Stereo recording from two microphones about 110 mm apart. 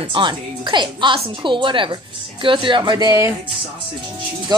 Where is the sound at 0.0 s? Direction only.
45° right (ahead or behind).